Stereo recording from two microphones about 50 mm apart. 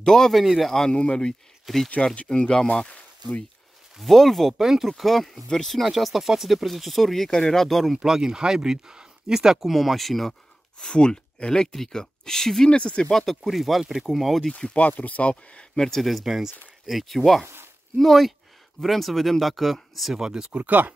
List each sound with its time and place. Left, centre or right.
0.0 s speech: centre
0.4 s speech: centre
0.7 s speech: centre
4.0 s speech: centre
8.0 s speech: centre
10.8 s speech: centre
13.1 s speech: centre
14.6 s speech: left; by 20.2 s centre
20.2 s speech: centre
20.6 s speech: right